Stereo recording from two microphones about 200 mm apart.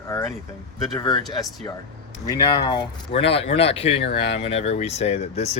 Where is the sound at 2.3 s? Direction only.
15° left (ahead or behind).